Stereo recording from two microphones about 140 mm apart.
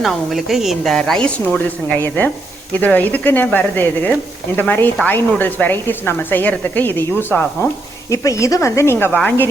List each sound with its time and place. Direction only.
0.0 s a woman's voice: centre (ahead or behind)